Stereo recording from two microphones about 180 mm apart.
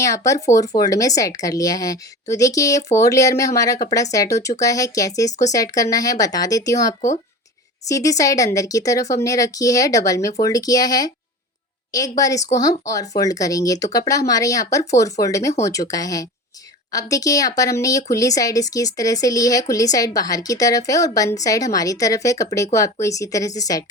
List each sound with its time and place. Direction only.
0.3 s speech: 20° left (ahead or behind)